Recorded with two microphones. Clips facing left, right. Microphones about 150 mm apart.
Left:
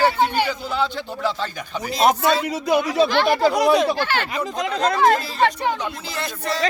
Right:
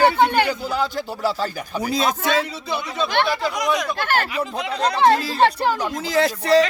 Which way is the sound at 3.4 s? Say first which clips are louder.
Left 6 dB; 35° left (ahead or behind).